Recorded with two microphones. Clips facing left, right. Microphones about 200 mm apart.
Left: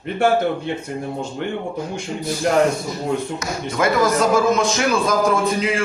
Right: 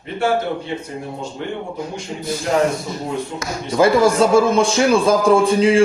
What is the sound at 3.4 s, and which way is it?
Speech, 30° right (ahead or behind).